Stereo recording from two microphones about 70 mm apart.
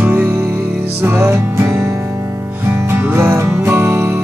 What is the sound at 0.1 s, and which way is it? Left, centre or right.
Music, right.